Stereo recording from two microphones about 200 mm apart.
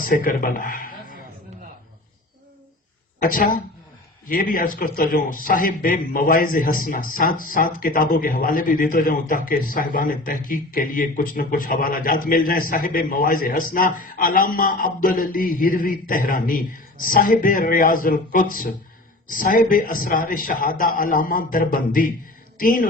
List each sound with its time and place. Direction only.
0.0 s speech: 40° left (ahead or behind)
3.2 s speech: 45° left (ahead or behind)